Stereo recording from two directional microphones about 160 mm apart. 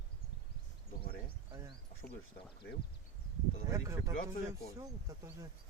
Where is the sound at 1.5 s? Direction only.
30° right (ahead or behind).